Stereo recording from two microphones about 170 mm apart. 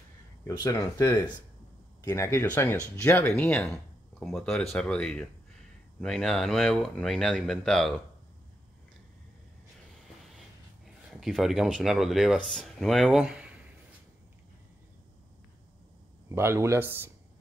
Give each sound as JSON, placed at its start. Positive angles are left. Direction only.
{"t": 0.4, "sound": "speech", "side_deg": 20}
{"t": 11.1, "sound": "speech", "side_deg": 0}
{"t": 16.3, "sound": "speech", "side_deg": -15}